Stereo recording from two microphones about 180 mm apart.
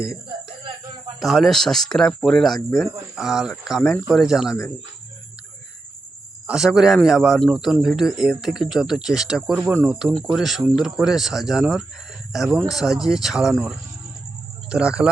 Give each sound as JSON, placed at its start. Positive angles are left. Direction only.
{"t": 0.6, "sound": "a sound", "side_deg": -25}
{"t": 1.2, "sound": "a man's voice", "side_deg": 0}
{"t": 6.5, "sound": "a man's voice", "side_deg": -5}